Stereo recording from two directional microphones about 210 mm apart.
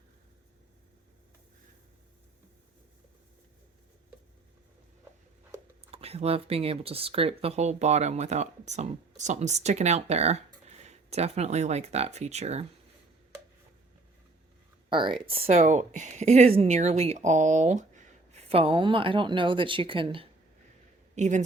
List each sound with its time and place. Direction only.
5.9 s speech: 30° right (ahead or behind)
14.8 s speech: 20° right (ahead or behind)
21.2 s speech: 35° right (ahead or behind)